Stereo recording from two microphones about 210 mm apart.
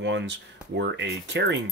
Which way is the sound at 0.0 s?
55° right (ahead or behind).